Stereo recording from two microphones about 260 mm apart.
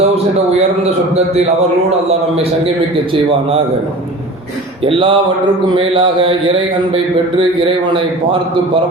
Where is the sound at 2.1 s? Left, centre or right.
Right.